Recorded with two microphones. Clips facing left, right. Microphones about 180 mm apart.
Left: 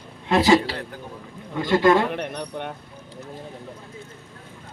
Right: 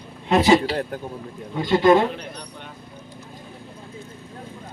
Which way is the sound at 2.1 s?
60° left (ahead or behind).